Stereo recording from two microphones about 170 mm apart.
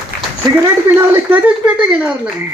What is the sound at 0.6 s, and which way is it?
Speech, 15° right (ahead or behind).